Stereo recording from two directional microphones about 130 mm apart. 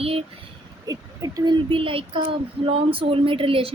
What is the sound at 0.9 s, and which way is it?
Speech, 30° right (ahead or behind).